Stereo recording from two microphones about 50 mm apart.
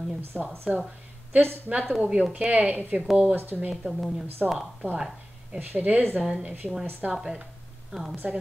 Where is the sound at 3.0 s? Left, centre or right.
Centre.